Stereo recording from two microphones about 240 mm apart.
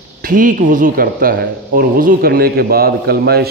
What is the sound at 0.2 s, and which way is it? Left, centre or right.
A man's voice, right.